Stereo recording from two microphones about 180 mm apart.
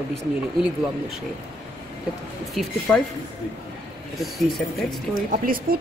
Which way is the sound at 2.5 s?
Centre (ahead or behind).